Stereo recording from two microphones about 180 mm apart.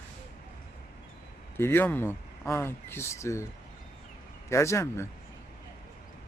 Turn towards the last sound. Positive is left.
turn(degrees=15)  # may be behind; listen again after turning